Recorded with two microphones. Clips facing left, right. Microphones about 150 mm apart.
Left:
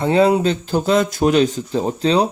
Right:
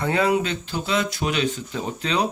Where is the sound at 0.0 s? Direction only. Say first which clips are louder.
Left 7 dB; 30° left (ahead or behind).